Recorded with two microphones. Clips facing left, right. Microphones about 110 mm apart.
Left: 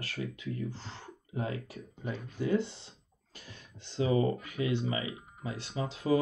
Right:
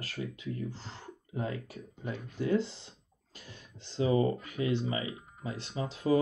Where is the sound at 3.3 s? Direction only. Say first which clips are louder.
Even; 30° right (ahead or behind).